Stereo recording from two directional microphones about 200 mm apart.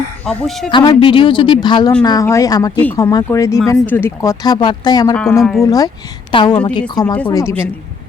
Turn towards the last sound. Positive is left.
turn(degrees=15)  # may be behind; listen again after turning